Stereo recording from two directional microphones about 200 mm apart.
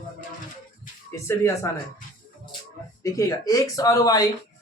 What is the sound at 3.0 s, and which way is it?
Speech, 15° left (ahead or behind).